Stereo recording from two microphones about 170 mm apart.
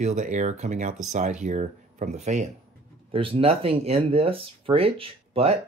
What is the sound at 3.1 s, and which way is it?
Speech, 30° right (ahead or behind).